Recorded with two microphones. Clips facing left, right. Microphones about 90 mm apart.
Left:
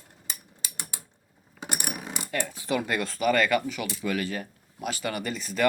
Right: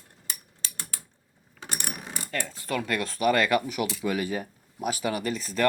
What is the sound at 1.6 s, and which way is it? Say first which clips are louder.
Coin: left 2 dB; 15° left (ahead or behind).